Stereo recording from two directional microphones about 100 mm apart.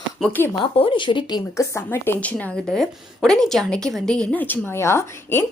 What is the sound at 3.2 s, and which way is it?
A woman's voice, 5° left (ahead or behind).